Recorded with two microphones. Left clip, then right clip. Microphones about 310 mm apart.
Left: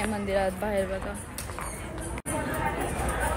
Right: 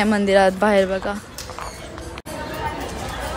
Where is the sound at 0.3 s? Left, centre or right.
Right.